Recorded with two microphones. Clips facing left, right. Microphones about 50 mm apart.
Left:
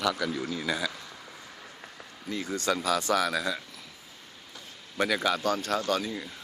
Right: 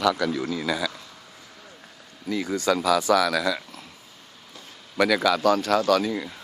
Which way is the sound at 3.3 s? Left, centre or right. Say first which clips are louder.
Right 5 dB; right.